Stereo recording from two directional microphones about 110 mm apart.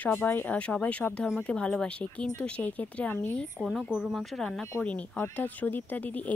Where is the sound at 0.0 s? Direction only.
15° left (ahead or behind).